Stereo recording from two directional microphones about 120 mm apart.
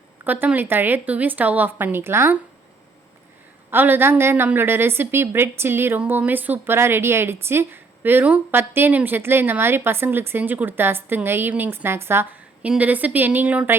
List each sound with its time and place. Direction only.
0.3 s a woman's voice: 15° right (ahead or behind)
3.7 s a woman's voice: 15° right (ahead or behind)